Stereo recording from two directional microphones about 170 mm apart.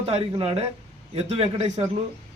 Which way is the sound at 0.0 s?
35° right (ahead or behind).